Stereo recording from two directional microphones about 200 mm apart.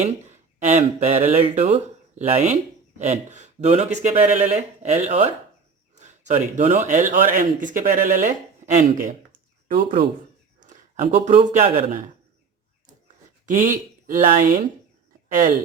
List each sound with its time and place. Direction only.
0.0 s speech: 35° right (ahead or behind)
10.6 s speech: 40° right (ahead or behind)
13.4 s speech: 40° right (ahead or behind)